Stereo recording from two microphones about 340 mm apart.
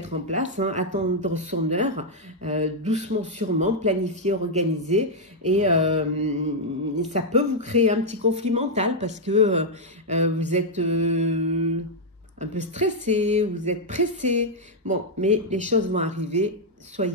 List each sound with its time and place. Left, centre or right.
0.0 s speech: right